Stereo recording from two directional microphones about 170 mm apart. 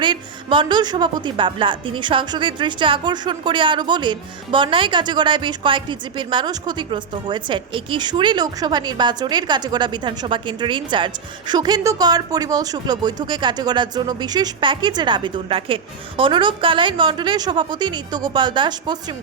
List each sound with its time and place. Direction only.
0.0 s a woman's voice: 30° right (ahead or behind)